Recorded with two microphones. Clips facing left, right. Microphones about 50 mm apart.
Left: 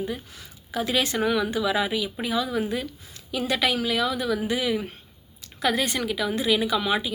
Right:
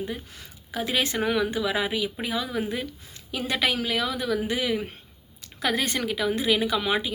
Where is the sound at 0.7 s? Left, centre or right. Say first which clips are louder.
Left 2 dB; right.